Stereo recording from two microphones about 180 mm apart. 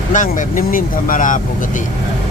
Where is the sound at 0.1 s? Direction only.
45° left (ahead or behind).